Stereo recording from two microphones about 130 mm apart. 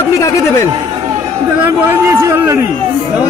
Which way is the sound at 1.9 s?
20° right (ahead or behind).